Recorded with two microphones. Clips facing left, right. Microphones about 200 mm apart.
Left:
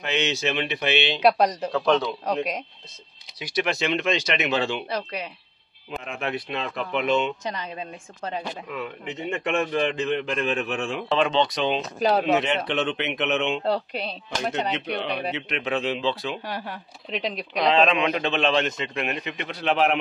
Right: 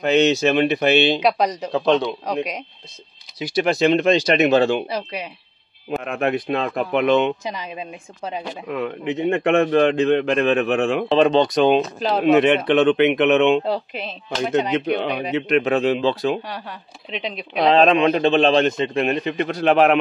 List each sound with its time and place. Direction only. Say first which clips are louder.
0.0 s speech: right 10 dB; 40° right (ahead or behind)
1.7 s a man's voice: right 4 dB; 25° right (ahead or behind)
2.3 s speech: left 1 dB; 5° left (ahead or behind)
3.3 s a man's voice: right 7 dB; 30° right (ahead or behind)
4.8 s speech: right 3 dB; 10° right (ahead or behind)
5.9 s speech: right 8 dB; 55° right (ahead or behind)
7.5 s speech: right 3 dB; 10° right (ahead or behind)
8.6 s a man's voice: right 8 dB; 60° right (ahead or behind)
11.1 s speech: right 5 dB; 40° right (ahead or behind)
12.3 s a man's voice: right 8 dB; 60° right (ahead or behind)
13.7 s speech: right 1 dB; 5° right (ahead or behind)
14.5 s speech: right 10 dB; 50° right (ahead or behind)
16.4 s speech: even; 10° left (ahead or behind)
17.6 s a man's voice: right 6 dB; 40° right (ahead or behind)